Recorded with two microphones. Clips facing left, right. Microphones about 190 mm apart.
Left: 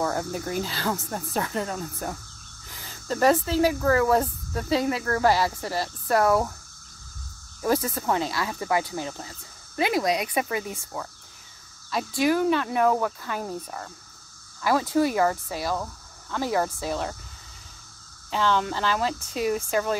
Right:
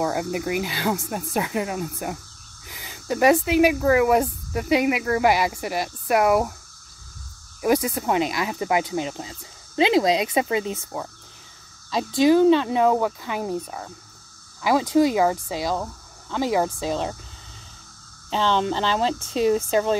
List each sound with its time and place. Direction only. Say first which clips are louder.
0.0 s speech: right 3 dB; 15° right (ahead or behind)
7.6 s speech: right 3 dB; 15° right (ahead or behind)
18.3 s speech: right 3 dB; 25° right (ahead or behind)